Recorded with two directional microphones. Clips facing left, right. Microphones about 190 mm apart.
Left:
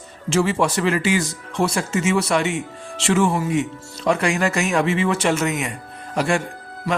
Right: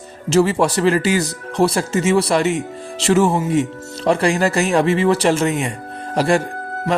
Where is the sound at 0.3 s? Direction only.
40° right (ahead or behind).